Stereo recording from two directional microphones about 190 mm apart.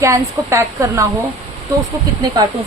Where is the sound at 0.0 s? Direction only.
15° right (ahead or behind).